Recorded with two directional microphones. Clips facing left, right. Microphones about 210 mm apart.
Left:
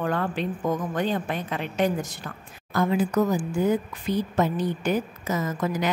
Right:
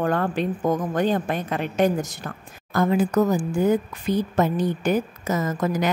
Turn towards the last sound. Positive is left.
turn(degrees=-40)  # may be behind; listen again after turning